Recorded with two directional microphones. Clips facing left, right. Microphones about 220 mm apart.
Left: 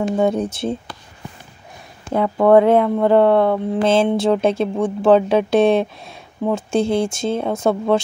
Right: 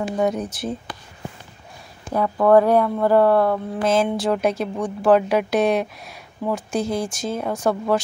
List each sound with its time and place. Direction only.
0.2 s speech: 30° left (ahead or behind)
2.1 s speech: 25° left (ahead or behind)